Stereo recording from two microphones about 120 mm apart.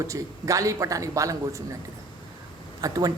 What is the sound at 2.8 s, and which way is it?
Speech, 30° right (ahead or behind).